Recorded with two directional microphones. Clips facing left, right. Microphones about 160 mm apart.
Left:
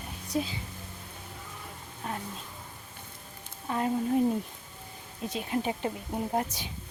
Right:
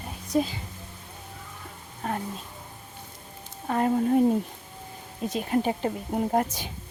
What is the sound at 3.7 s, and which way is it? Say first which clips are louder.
Speech: right 5 dB; 55° right (ahead or behind).